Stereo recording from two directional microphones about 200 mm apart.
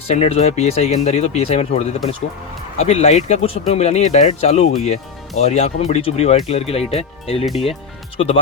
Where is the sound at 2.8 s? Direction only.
30° left (ahead or behind).